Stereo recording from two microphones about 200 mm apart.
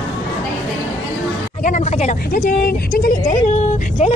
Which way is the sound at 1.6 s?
40° left (ahead or behind).